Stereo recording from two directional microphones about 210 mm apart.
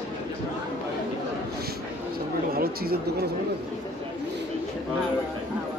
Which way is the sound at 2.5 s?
45° right (ahead or behind).